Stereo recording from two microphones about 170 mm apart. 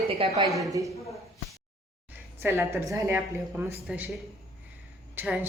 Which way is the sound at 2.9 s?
15° right (ahead or behind).